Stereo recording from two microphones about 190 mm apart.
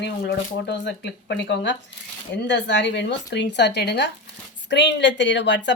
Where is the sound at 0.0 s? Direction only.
65° left (ahead or behind).